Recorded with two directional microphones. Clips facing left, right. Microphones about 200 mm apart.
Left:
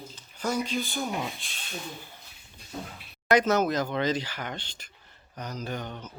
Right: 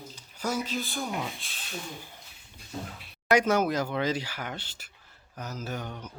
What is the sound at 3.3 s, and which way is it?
Speech, 10° right (ahead or behind).